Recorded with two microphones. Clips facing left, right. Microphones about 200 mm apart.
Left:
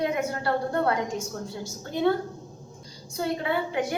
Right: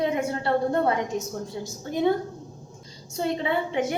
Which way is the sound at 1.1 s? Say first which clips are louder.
Right 3 dB; 20° right (ahead or behind).